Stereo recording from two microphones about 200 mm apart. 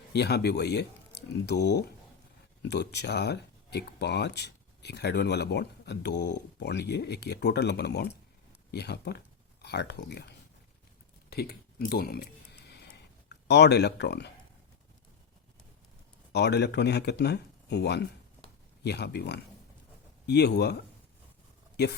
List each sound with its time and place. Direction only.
0.1 s speech: 55° left (ahead or behind)
11.3 s a sound: 50° left (ahead or behind)
16.3 s speech: 55° left (ahead or behind)